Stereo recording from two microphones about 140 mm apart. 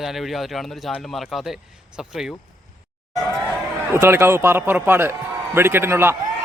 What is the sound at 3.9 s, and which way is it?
A man's voice, 15° right (ahead or behind).